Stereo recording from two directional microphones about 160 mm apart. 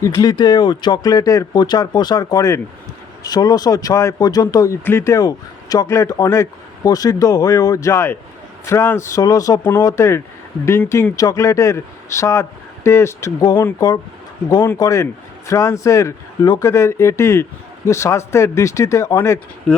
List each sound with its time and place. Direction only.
0.0 s speech: 20° left (ahead or behind)